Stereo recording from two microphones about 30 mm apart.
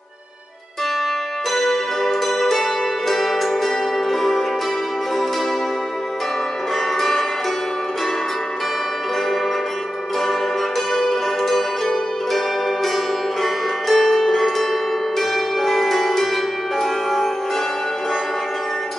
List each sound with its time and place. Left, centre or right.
1.5 s zither: centre
3.1 s music: centre
7.0 s zither: centre
10.9 s music: centre
11.4 s zither: centre